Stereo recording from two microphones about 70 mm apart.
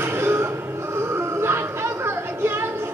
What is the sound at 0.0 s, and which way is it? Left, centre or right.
Music, right.